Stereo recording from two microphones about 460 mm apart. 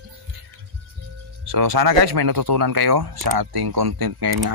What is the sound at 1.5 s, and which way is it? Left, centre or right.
Speech, right.